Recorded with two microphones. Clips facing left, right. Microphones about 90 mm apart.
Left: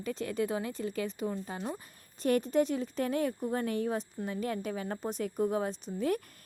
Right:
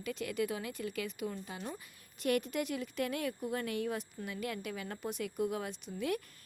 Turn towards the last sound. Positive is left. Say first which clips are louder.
# left 5 dB
turn(degrees=35)  # may be behind; listen again after turning